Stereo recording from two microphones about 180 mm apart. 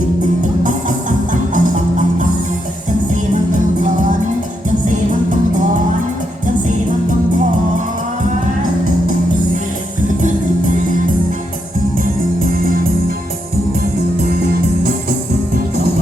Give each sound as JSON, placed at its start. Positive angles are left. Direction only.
{"t": 0.6, "sound": "music", "side_deg": -45}